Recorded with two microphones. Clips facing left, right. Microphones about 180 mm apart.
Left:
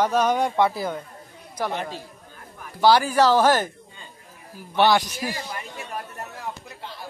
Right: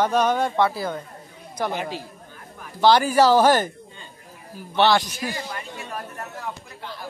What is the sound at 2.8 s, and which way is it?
Speech, 5° left (ahead or behind).